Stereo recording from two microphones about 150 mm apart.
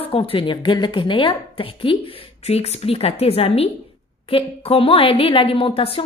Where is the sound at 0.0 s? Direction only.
40° left (ahead or behind).